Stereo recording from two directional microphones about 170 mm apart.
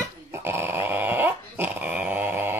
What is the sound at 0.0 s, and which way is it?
Dog, 15° right (ahead or behind).